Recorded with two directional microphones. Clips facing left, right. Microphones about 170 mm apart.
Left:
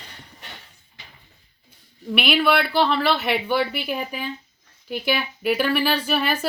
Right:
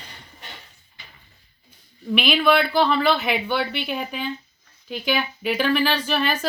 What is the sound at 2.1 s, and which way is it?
Speech, 5° left (ahead or behind).